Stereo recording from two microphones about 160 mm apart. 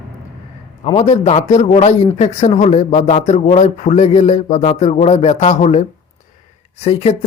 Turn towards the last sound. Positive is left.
turn(degrees=40)  # may be behind; listen again after turning